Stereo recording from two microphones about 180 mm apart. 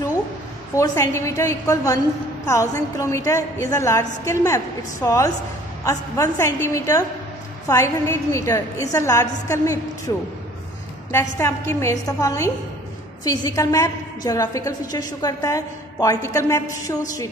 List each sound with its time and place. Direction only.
0.7 s a woman's voice: 15° left (ahead or behind)